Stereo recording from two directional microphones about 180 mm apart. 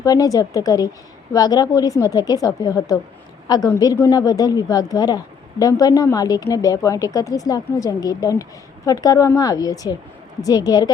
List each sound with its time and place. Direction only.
0.0 s a woman's voice: 20° left (ahead or behind)